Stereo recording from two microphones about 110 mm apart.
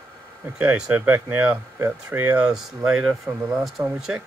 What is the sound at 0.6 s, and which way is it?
Speech, 15° right (ahead or behind).